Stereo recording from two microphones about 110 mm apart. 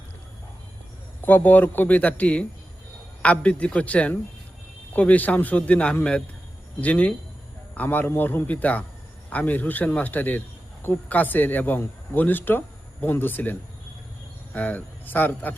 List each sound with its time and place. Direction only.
1.2 s speech: 15° left (ahead or behind)